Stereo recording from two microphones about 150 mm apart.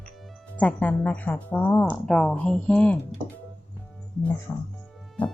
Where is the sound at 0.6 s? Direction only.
10° left (ahead or behind).